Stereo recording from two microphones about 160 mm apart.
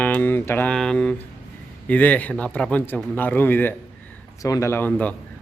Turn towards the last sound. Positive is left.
turn(degrees=10)  # may be behind; listen again after turning